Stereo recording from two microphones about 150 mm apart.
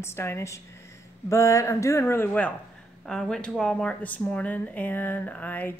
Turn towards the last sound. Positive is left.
turn(degrees=10)  # may be behind; listen again after turning